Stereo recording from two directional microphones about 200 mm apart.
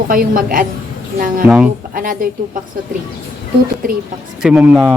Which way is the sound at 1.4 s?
5° right (ahead or behind).